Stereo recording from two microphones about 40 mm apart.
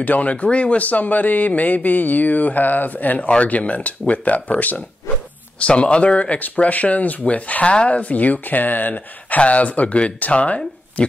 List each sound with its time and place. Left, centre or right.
0.0 s speech: left
9.4 s speech: left